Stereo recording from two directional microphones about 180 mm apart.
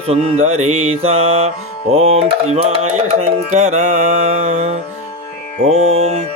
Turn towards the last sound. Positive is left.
turn(degrees=-35)  # may be behind; listen again after turning